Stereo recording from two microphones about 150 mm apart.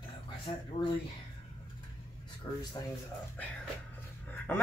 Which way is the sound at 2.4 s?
25° left (ahead or behind).